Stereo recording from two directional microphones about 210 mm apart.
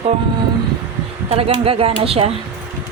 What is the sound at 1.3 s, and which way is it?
A woman's voice, 25° right (ahead or behind).